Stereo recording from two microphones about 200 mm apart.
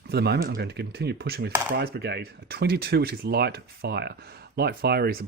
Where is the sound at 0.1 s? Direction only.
55° right (ahead or behind).